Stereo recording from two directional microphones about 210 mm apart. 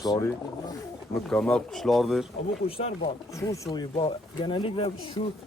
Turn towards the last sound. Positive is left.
turn(degrees=25)  # may be behind; listen again after turning